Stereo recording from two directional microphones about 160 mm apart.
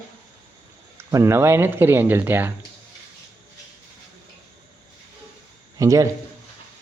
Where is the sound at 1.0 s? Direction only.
15° right (ahead or behind).